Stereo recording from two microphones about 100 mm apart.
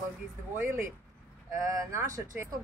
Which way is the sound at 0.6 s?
25° right (ahead or behind).